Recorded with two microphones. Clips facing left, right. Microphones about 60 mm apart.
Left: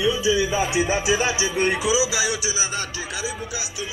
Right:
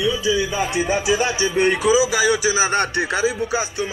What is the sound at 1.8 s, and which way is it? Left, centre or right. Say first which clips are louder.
Speech: right 6 dB; right.